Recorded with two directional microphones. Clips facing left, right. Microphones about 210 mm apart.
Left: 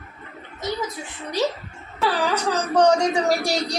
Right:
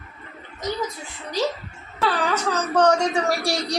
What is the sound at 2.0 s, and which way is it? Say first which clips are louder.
Wail: left 1 dB; 15° left (ahead or behind).